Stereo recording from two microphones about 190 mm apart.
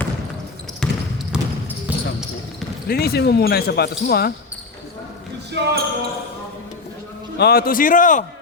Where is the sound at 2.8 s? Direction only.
55° left (ahead or behind).